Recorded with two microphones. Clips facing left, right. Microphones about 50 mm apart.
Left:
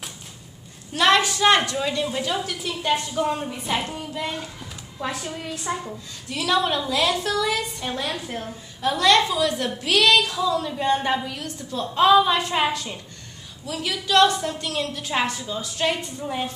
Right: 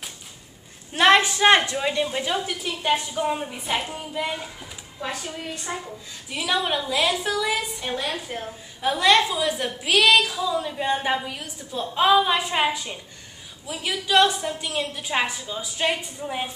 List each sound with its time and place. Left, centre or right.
0.9 s a woman's voice: right
2.5 s a woman's voice: centre
6.2 s a woman's voice: centre